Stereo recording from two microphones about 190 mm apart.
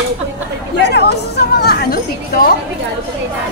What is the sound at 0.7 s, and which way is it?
Speech, 60° left (ahead or behind).